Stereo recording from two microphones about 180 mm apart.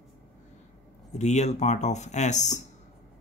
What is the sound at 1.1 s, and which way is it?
Speech, 40° left (ahead or behind).